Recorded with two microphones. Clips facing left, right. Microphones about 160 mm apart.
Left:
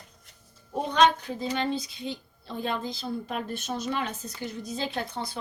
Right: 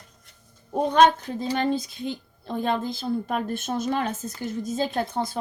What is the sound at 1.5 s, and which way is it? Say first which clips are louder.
Speech: right 6 dB; 50° right (ahead or behind).